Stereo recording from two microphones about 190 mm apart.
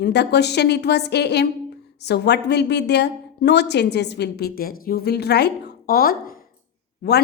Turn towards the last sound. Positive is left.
turn(degrees=60)  # may be behind; listen again after turning